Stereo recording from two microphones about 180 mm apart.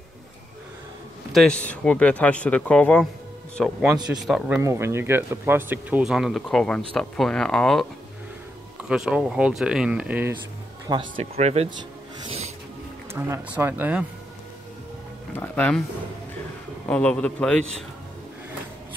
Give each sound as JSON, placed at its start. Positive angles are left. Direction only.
{"t": 1.3, "sound": "speech", "side_deg": 5}
{"t": 4.6, "sound": "speech", "side_deg": -15}
{"t": 8.8, "sound": "speech", "side_deg": -5}
{"t": 10.9, "sound": "speech", "side_deg": -25}
{"t": 11.4, "sound": "speech", "side_deg": -35}
{"t": 12.3, "sound": "music", "side_deg": -35}
{"t": 13.2, "sound": "speech", "side_deg": -10}
{"t": 15.3, "sound": "speech", "side_deg": 10}
{"t": 16.8, "sound": "speech", "side_deg": 5}